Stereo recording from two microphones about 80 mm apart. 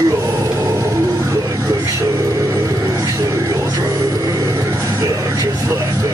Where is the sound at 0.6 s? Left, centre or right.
Right.